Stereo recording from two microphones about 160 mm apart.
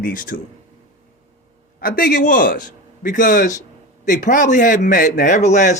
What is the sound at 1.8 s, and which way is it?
A man's voice, 65° left (ahead or behind).